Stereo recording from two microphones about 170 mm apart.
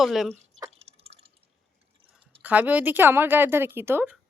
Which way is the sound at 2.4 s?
10° right (ahead or behind).